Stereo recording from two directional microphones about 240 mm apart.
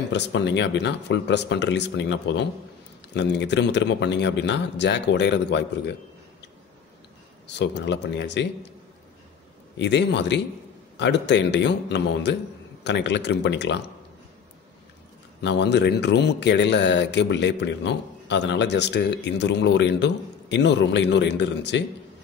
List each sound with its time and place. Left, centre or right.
0.1 s speech: left
7.4 s speech: left
9.8 s speech: left
15.4 s speech: left